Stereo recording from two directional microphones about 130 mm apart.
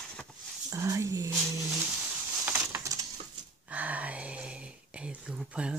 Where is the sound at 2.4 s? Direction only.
20° right (ahead or behind).